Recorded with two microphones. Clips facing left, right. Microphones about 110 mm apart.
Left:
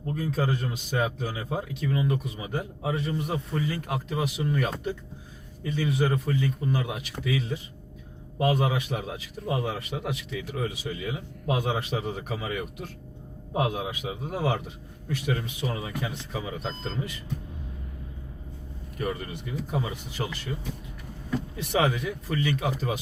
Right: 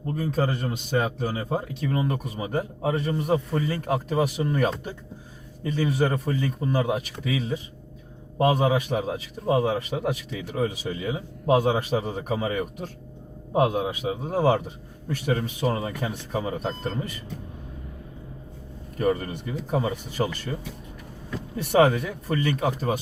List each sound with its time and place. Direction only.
0.2 s a man's voice: 45° right (ahead or behind)
8.4 s a man's voice: 30° right (ahead or behind)
8.6 s a man's voice: 45° right (ahead or behind)
9.6 s speech: 55° right (ahead or behind)
10.5 s a man's voice: 40° right (ahead or behind)
18.9 s a man's voice: 45° right (ahead or behind)
21.5 s a man's voice: 45° right (ahead or behind)